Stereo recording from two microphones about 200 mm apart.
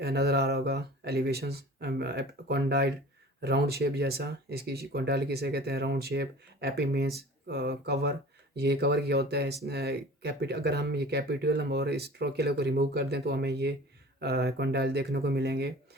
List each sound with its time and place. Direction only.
0.0 s speech: 55° right (ahead or behind)